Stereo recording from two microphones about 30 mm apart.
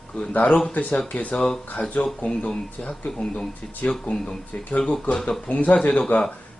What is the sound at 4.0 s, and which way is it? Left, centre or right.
Speech, left.